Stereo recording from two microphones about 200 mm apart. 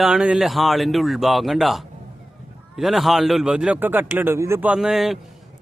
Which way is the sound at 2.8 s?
Centre (ahead or behind).